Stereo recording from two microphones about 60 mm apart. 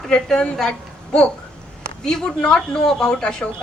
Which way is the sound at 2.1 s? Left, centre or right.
Centre.